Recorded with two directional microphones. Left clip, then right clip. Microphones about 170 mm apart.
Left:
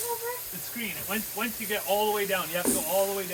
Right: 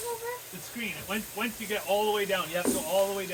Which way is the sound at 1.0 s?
20° left (ahead or behind).